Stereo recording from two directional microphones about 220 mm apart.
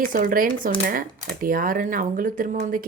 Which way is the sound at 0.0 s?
40° right (ahead or behind).